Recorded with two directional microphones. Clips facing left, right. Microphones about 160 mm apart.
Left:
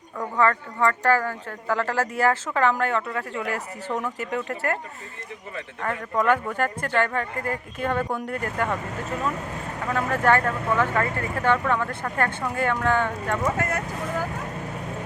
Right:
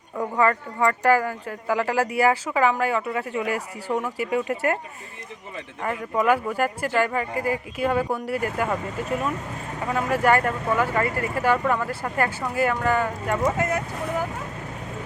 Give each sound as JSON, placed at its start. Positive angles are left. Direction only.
{"t": 0.2, "sound": "speech", "side_deg": -10}
{"t": 9.9, "sound": "speech", "side_deg": -10}
{"t": 13.6, "sound": "speech", "side_deg": -20}